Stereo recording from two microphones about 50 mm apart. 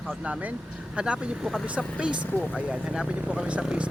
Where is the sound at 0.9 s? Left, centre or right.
Right.